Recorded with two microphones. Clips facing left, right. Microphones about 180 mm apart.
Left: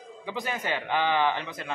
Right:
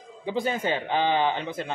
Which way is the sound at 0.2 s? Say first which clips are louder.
Right 6 dB; 30° right (ahead or behind).